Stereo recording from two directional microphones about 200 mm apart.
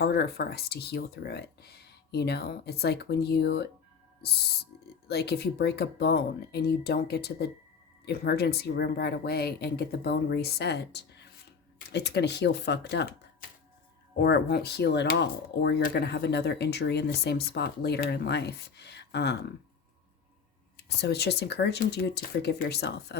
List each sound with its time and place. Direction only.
0.0 s speech: 50° left (ahead or behind)
5.0 s speech: 55° left (ahead or behind)
14.2 s speech: 55° left (ahead or behind)
20.8 s speech: 55° left (ahead or behind)